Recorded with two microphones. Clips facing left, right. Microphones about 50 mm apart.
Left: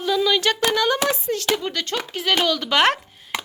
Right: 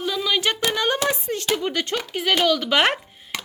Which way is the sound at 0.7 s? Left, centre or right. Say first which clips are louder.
Left 2 dB; right.